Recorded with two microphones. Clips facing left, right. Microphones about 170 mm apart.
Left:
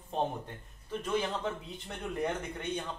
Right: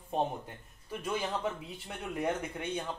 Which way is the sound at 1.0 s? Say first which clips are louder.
Left 1 dB; 10° right (ahead or behind).